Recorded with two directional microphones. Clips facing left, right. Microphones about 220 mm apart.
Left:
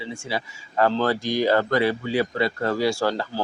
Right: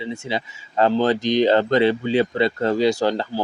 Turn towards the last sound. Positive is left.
turn(degrees=-20)  # may be behind; listen again after turning